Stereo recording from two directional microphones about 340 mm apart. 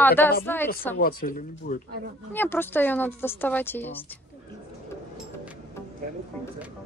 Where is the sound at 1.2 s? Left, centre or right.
Left.